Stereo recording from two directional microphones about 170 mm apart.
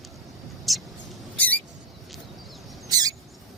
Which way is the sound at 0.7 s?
Centre (ahead or behind).